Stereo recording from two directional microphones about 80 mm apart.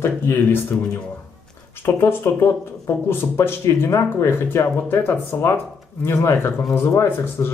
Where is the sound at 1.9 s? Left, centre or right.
Left.